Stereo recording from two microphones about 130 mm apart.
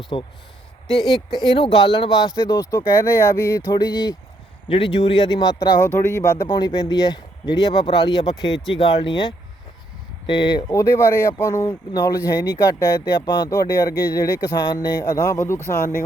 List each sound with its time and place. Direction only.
0.1 s a man's voice: 40° left (ahead or behind)
5.9 s a man's voice: 20° left (ahead or behind)